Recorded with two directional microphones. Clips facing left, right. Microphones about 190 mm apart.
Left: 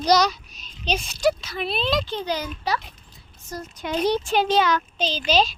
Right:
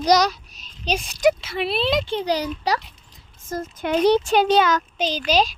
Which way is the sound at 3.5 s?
50° right (ahead or behind).